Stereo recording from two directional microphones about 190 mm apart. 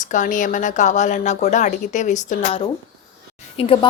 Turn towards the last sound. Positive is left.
turn(degrees=30)  # may be behind; listen again after turning